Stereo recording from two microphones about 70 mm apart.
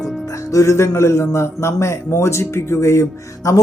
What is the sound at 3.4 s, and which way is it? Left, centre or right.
Speech, left.